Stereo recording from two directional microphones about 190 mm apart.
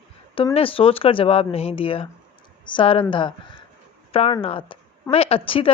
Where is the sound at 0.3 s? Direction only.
30° left (ahead or behind).